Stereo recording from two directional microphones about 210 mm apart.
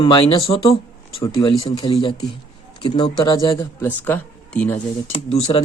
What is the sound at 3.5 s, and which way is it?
Speech, 10° left (ahead or behind).